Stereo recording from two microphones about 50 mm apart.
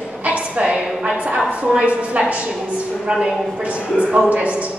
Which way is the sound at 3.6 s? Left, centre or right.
Right.